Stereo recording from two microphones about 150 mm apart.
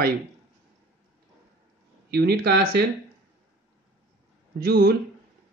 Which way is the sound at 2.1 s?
90° right.